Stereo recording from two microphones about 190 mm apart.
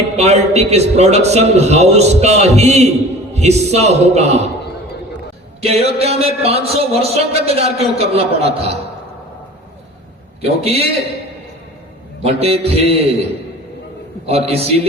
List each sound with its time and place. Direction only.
0.2 s speech: 35° right (ahead or behind)
5.6 s speech: 30° right (ahead or behind)
10.4 s speech: 30° right (ahead or behind)
12.2 s speech: 30° right (ahead or behind)
14.3 s speech: 35° right (ahead or behind)